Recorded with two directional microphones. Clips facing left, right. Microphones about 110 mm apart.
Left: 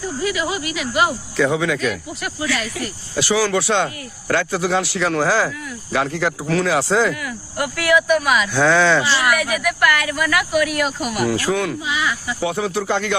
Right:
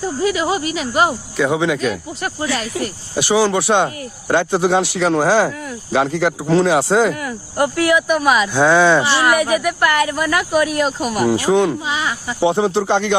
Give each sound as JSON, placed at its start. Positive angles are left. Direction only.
{"t": 0.0, "sound": "speech", "side_deg": -30}
{"t": 1.4, "sound": "speech", "side_deg": -20}
{"t": 3.2, "sound": "speech", "side_deg": -20}
{"t": 7.1, "sound": "speech", "side_deg": -35}
{"t": 11.3, "sound": "speech", "side_deg": -20}